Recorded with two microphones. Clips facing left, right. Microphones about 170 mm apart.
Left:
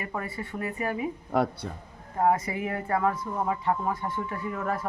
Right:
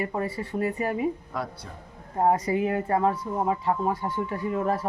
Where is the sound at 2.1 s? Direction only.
35° right (ahead or behind).